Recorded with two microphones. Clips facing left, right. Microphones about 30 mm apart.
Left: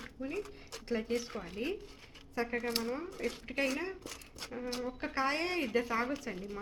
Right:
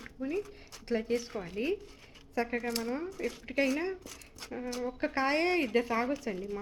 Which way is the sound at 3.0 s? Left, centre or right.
Left.